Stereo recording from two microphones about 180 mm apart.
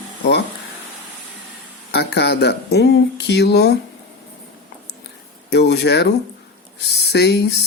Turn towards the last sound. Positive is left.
turn(degrees=70)  # may be behind; listen again after turning